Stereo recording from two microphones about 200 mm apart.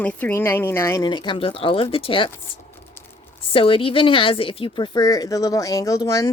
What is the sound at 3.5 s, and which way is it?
A woman's voice, 25° left (ahead or behind).